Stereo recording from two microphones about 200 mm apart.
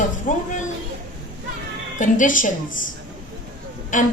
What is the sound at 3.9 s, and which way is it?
Speech, 40° left (ahead or behind).